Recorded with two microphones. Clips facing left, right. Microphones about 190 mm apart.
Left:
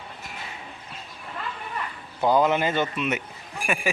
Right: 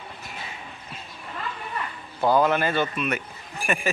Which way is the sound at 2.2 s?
20° left (ahead or behind).